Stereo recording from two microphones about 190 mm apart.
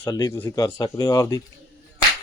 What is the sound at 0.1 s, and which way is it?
Speech, 20° left (ahead or behind).